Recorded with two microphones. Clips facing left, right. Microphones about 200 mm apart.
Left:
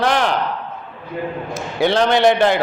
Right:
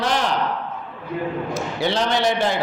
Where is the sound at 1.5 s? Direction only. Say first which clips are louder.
Left 8 dB; 55° left (ahead or behind).